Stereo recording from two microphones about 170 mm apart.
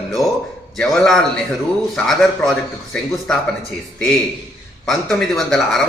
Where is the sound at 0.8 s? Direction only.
Centre (ahead or behind).